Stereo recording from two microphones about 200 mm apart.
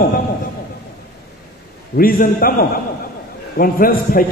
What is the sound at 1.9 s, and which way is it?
Speech, 45° left (ahead or behind).